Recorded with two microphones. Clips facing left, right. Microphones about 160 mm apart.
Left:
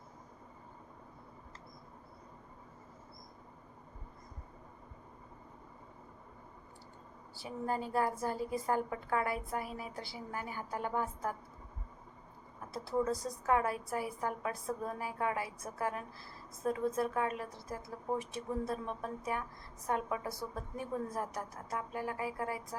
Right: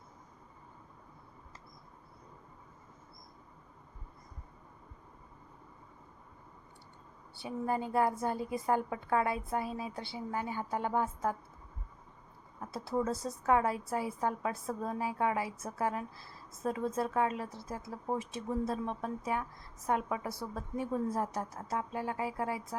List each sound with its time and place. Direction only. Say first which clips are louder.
7.4 s a woman's voice: right 3 dB; 20° right (ahead or behind)
13.1 s a woman's voice: right 2 dB; 25° right (ahead or behind)